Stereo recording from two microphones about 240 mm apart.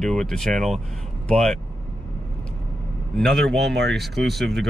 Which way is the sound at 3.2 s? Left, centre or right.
Centre.